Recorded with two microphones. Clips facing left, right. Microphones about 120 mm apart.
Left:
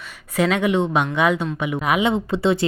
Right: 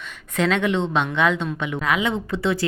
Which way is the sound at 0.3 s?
10° left (ahead or behind).